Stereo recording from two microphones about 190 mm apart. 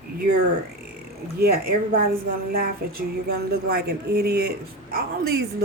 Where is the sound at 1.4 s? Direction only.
55° right (ahead or behind).